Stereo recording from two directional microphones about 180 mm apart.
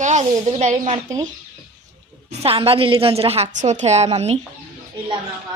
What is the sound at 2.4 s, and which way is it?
A woman's voice, 30° right (ahead or behind).